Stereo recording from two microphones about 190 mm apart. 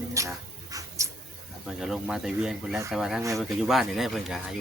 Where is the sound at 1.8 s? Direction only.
Centre (ahead or behind).